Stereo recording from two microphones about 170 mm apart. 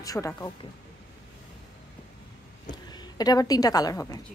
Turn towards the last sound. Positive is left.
turn(degrees=20)  # may be behind; listen again after turning